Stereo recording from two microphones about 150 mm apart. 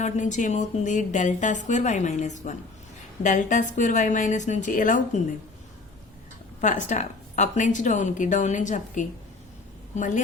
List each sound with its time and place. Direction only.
0.0 s a woman's voice: 55° left (ahead or behind)
6.6 s a woman's voice: 55° left (ahead or behind)